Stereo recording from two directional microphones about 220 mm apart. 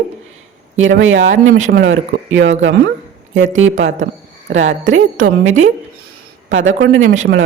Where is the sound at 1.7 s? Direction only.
55° right (ahead or behind).